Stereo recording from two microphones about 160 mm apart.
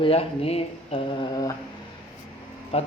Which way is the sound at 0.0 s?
40° left (ahead or behind).